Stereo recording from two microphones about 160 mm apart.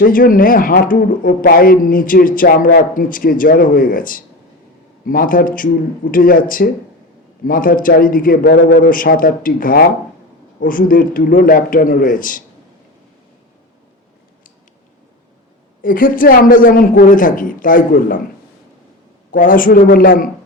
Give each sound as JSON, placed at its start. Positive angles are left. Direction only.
{"t": 0.0, "sound": "a man's voice", "side_deg": 60}
{"t": 15.8, "sound": "a man's voice", "side_deg": 60}
{"t": 19.3, "sound": "a man's voice", "side_deg": 60}